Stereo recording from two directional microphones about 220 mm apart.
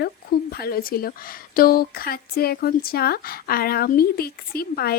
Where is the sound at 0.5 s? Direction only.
45° left (ahead or behind).